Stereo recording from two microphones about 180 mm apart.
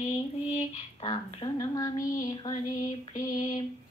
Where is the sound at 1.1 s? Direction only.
25° left (ahead or behind).